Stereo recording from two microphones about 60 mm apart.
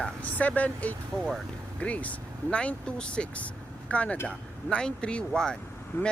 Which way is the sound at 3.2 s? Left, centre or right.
Centre.